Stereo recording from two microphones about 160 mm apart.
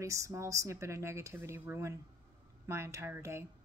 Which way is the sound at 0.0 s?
20° right (ahead or behind).